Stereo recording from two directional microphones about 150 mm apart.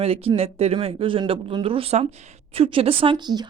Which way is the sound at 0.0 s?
40° right (ahead or behind).